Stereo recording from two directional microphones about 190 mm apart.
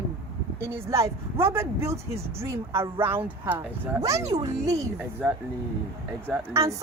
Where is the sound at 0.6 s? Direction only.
15° right (ahead or behind).